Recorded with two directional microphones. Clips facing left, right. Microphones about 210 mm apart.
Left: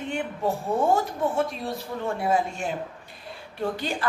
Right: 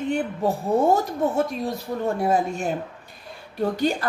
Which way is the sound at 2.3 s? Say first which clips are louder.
Even; 40° right (ahead or behind).